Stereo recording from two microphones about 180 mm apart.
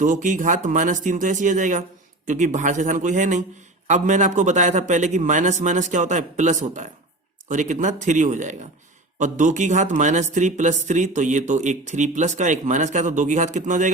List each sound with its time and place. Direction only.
0.0 s a man's voice: 45° right (ahead or behind)